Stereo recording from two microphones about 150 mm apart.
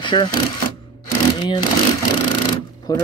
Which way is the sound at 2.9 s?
25° left (ahead or behind).